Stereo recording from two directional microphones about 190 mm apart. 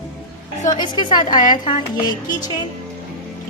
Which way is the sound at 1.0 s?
20° left (ahead or behind).